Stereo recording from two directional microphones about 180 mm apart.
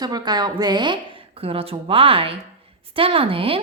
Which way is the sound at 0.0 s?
20° right (ahead or behind).